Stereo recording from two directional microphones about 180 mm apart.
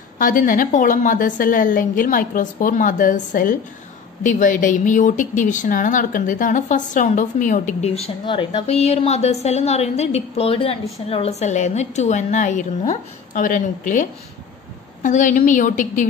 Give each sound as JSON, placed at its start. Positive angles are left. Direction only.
{"t": 0.2, "sound": "a woman's voice", "side_deg": 50}